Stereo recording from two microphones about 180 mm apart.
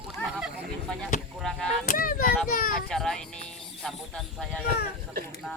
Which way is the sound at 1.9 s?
50° left (ahead or behind).